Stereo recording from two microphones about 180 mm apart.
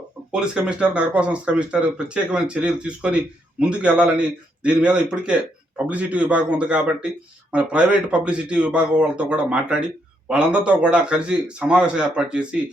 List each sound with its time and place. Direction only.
0.3 s speech: 5° right (ahead or behind)